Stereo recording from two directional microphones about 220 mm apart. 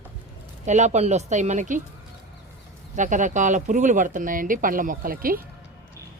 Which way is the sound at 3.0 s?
35° right (ahead or behind).